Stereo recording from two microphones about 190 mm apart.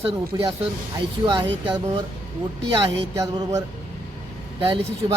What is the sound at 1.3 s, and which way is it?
Speech, 25° right (ahead or behind).